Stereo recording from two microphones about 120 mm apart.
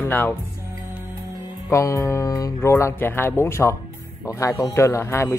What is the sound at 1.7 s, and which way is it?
Speech, 25° left (ahead or behind).